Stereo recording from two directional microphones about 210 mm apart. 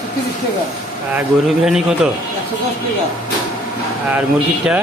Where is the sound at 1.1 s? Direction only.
5° right (ahead or behind).